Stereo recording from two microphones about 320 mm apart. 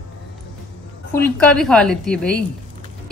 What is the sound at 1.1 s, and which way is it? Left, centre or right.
A woman's voice, centre.